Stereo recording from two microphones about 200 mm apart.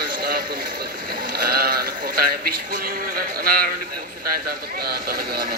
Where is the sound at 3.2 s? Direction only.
45° right (ahead or behind).